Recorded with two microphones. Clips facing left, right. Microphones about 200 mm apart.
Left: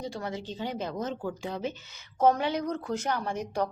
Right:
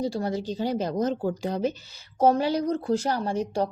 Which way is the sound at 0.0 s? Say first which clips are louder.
Right 8 dB; 35° right (ahead or behind).